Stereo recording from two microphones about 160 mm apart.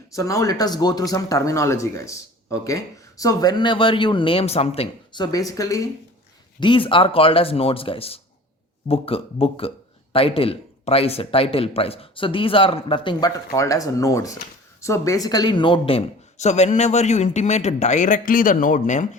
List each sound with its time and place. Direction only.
0.2 s speech: 20° left (ahead or behind)
6.6 s a man's voice: 30° left (ahead or behind); by 19.0 s 55° left (ahead or behind)